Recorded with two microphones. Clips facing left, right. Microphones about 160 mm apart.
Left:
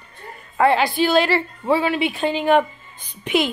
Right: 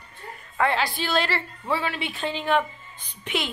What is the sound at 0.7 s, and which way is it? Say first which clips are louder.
A woman's voice: left 8 dB; 15° left (ahead or behind).